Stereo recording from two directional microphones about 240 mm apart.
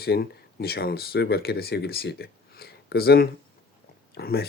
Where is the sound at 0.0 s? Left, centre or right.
Left.